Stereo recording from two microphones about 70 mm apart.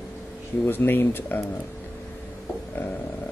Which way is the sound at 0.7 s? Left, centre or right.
Left.